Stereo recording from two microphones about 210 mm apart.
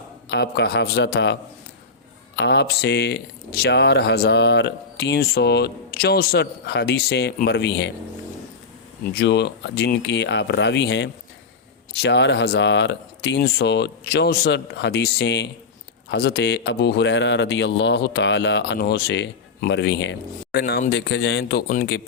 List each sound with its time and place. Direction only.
0.3 s speech: 50° left (ahead or behind)
9.1 s speech: 55° left (ahead or behind)
21.7 s speech: 45° left (ahead or behind)